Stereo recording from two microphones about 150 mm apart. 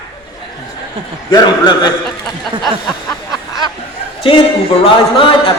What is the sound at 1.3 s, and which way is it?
Speech, 30° left (ahead or behind).